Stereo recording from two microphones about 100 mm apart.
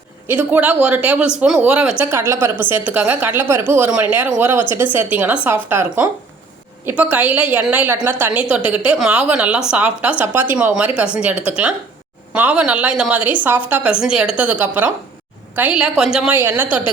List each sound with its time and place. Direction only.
0.3 s speech: 15° right (ahead or behind)
2.0 s a woman's voice: 25° right (ahead or behind); by 16.4 s 10° right (ahead or behind)
16.4 s a woman's voice: 20° right (ahead or behind)